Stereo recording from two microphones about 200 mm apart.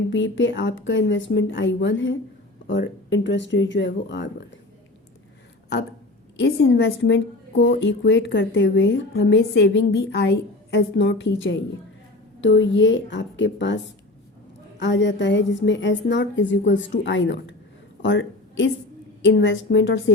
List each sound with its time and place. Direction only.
0.1 s a woman's voice: 70° left (ahead or behind)
6.3 s a woman's voice: 60° left (ahead or behind)